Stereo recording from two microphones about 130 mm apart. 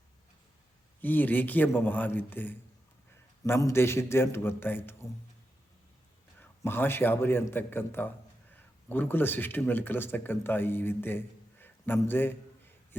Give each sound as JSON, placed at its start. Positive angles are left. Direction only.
{"t": 1.0, "sound": "a man's voice", "side_deg": 15}
{"t": 6.4, "sound": "a man's voice", "side_deg": 15}